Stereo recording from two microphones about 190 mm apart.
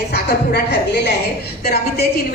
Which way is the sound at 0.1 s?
60° left (ahead or behind).